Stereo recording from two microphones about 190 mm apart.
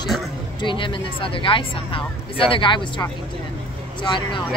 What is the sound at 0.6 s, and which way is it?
Speech, 25° left (ahead or behind).